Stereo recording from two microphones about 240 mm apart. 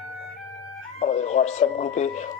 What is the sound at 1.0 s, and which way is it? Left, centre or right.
Speech, left.